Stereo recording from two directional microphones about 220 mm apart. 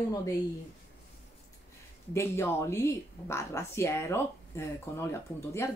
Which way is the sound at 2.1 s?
10° left (ahead or behind).